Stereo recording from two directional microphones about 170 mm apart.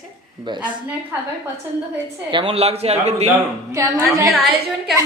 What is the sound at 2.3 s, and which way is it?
A man's voice, 30° right (ahead or behind).